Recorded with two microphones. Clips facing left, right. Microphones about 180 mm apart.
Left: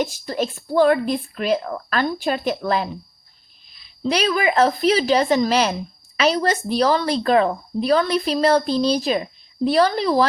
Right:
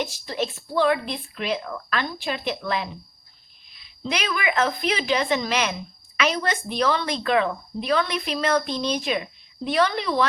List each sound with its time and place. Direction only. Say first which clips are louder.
0.0 s a woman's voice: left 4 dB; 45° left (ahead or behind)